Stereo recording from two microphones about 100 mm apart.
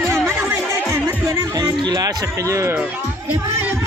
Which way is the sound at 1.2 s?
30° right (ahead or behind).